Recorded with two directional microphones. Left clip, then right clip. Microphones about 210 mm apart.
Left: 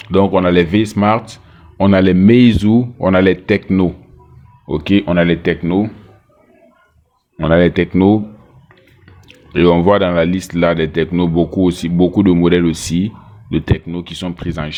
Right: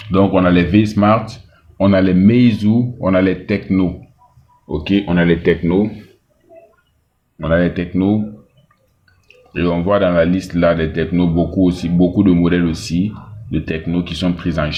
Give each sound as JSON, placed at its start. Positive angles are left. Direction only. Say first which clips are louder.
{"t": 0.0, "sound": "speech", "louder": "left 1 dB", "side_deg": 50}
{"t": 7.3, "sound": "speech", "louder": "left 4 dB", "side_deg": 50}
{"t": 9.2, "sound": "speech", "louder": "left 8 dB", "side_deg": 50}